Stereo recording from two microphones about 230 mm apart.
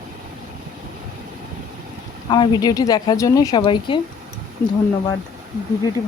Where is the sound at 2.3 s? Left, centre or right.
Centre.